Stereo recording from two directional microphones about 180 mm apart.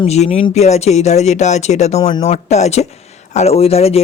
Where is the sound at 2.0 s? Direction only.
25° left (ahead or behind).